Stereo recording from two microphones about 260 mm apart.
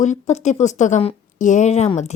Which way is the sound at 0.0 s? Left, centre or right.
Left.